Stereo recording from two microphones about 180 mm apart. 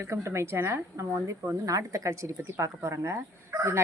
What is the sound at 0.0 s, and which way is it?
A woman's voice, 15° right (ahead or behind).